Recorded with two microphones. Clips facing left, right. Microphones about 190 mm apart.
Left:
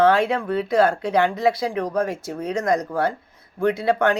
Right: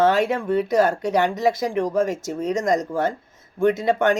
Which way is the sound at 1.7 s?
25° right (ahead or behind).